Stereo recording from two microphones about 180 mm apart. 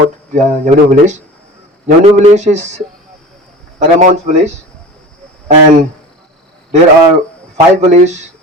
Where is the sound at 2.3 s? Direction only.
40° right (ahead or behind).